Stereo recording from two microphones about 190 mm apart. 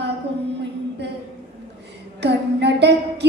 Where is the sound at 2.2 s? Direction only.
65° right (ahead or behind).